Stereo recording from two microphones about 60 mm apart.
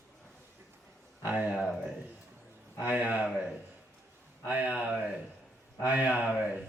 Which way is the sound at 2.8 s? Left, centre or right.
Right.